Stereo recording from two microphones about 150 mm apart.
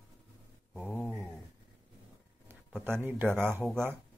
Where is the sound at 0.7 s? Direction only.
10° left (ahead or behind).